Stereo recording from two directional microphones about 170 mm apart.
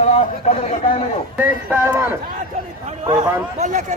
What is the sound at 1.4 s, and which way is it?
Speech, 10° right (ahead or behind).